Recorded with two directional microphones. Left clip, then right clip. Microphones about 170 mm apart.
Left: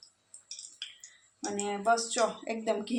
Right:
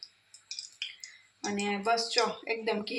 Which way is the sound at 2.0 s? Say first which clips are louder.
Right 1 dB; 40° left (ahead or behind).